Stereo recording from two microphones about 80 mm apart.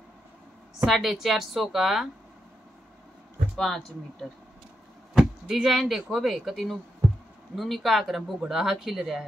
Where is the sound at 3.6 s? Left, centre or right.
Centre.